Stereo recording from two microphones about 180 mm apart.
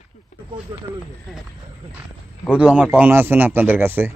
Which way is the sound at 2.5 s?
5° right (ahead or behind).